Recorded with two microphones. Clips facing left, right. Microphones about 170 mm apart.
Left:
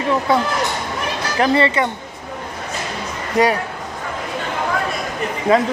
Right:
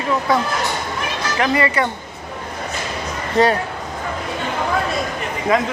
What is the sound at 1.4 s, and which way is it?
Speech, 30° left (ahead or behind).